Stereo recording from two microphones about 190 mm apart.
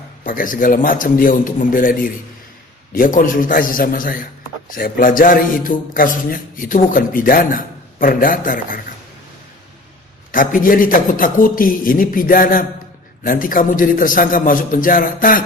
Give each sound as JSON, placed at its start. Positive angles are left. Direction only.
{"t": 0.2, "sound": "a man's voice", "side_deg": 45}
{"t": 10.3, "sound": "a man's voice", "side_deg": 45}